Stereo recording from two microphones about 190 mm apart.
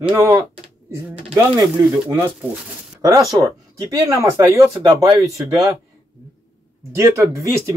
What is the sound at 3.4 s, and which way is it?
Speech, 20° right (ahead or behind).